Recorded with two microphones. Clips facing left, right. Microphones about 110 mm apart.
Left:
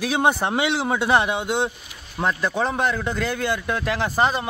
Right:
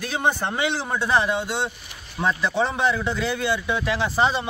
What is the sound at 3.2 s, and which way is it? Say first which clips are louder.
Speech: left 1 dB; 50° left (ahead or behind).